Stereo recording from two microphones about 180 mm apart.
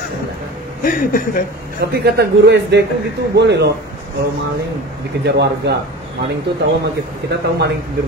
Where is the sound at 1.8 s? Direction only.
60° right (ahead or behind).